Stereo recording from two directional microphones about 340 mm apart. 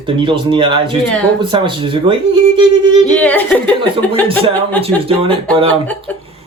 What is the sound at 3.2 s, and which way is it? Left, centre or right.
Speech, centre.